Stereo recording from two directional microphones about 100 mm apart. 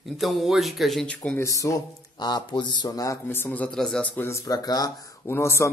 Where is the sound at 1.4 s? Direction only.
30° left (ahead or behind).